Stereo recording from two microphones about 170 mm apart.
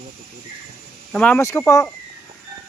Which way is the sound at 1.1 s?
5° left (ahead or behind).